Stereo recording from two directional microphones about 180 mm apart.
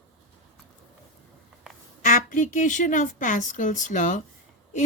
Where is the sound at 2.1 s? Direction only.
45° left (ahead or behind).